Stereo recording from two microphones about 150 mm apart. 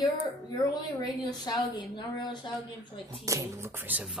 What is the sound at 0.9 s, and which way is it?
A woman's voice, 25° left (ahead or behind).